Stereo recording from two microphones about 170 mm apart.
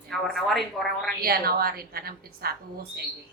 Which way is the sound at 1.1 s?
60° right (ahead or behind).